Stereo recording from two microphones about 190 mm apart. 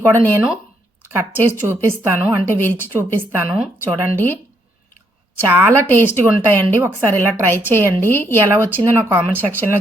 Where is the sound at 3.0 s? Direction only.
10° right (ahead or behind).